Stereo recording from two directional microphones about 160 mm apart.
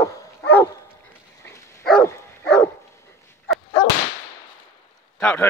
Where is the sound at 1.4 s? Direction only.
15° left (ahead or behind).